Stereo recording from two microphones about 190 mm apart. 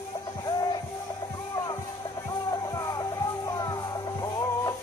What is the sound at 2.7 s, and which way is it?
Music, 20° left (ahead or behind).